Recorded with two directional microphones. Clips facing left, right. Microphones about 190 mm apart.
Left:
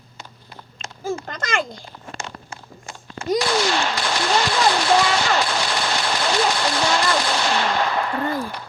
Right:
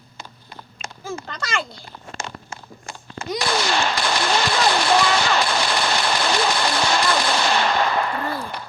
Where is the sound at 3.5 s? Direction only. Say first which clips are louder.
Left 1 dB; 65° right (ahead or behind).